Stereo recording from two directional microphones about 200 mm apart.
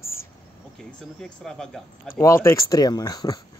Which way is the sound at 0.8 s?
Centre (ahead or behind).